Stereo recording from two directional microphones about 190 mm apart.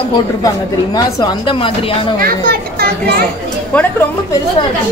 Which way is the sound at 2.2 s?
50° right (ahead or behind).